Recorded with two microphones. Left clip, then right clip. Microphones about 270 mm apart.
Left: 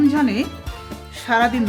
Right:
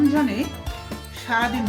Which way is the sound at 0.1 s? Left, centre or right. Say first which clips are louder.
Left 2 dB; left.